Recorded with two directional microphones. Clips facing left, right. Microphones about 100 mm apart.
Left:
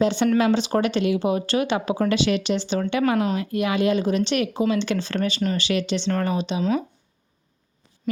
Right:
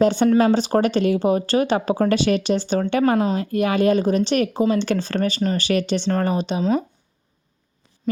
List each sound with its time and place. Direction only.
0.0 s speech: 40° right (ahead or behind)
6.1 s speech: 35° right (ahead or behind)